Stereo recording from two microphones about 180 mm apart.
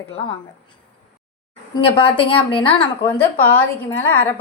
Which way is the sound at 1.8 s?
30° left (ahead or behind).